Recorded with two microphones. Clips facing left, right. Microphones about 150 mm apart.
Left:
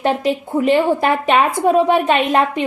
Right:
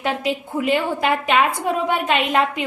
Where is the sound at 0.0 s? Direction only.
35° left (ahead or behind).